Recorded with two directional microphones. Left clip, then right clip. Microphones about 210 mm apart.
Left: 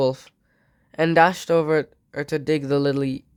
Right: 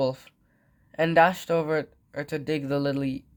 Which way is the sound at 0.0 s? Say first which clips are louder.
Left 5 dB; 45° left (ahead or behind).